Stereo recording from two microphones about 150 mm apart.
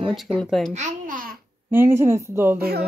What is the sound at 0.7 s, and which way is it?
Babbling, 60° right (ahead or behind).